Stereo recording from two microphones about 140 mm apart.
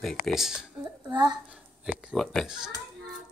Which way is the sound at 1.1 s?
30° right (ahead or behind).